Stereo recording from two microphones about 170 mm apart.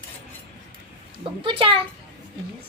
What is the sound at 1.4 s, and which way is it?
Speech, 30° right (ahead or behind).